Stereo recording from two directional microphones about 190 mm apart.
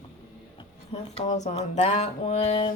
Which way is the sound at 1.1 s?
40° left (ahead or behind).